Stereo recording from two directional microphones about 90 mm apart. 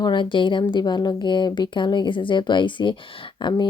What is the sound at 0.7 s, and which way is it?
Speech, 55° left (ahead or behind).